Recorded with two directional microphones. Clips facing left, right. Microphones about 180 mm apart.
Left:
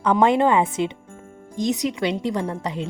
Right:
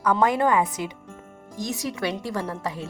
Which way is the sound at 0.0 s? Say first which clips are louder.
Left 4 dB; 25° left (ahead or behind).